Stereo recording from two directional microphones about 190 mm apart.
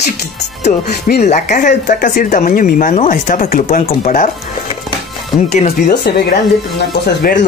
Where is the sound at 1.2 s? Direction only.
40° left (ahead or behind).